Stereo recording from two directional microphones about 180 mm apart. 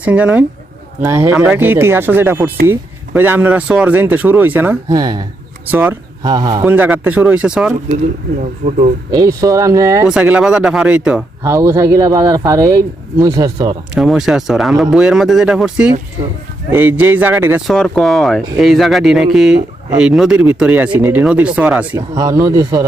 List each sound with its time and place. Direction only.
0.0 s speech: 5° right (ahead or behind)
4.9 s speech: 20° right (ahead or behind)
5.6 s speech: 10° right (ahead or behind)
6.2 s speech: 20° right (ahead or behind)
6.7 s speech: 10° right (ahead or behind)
7.9 s speech: 45° right (ahead or behind)
9.1 s speech: 20° right (ahead or behind)
10.1 s speech: 5° right (ahead or behind)
13.9 s speech: 5° right (ahead or behind)
17.7 s speech: 5° left (ahead or behind); by 22.8 s 15° right (ahead or behind)